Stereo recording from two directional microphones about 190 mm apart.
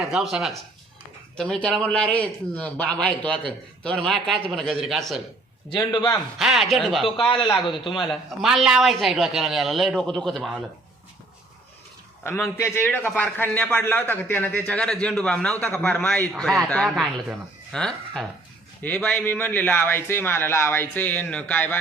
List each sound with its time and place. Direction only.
0.0 s a man's voice: centre (ahead or behind)
5.8 s a man's voice: 20° left (ahead or behind)
6.4 s a man's voice: centre (ahead or behind)
7.3 s a man's voice: 25° left (ahead or behind)
8.0 s a man's voice: centre (ahead or behind)
12.2 s a man's voice: 10° left (ahead or behind)